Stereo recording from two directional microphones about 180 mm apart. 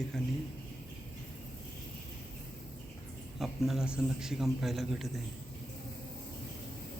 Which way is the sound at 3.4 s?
Centre (ahead or behind).